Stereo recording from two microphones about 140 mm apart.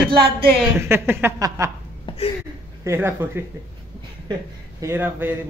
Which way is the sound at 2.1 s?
40° left (ahead or behind).